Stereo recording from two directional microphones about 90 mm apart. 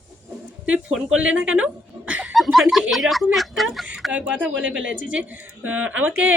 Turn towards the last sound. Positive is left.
turn(degrees=-15)  # may be behind; listen again after turning